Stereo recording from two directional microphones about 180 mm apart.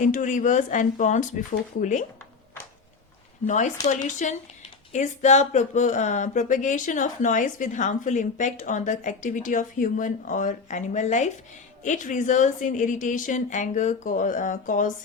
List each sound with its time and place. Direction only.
0.0 s speech: 45° left (ahead or behind)
3.4 s speech: 40° left (ahead or behind)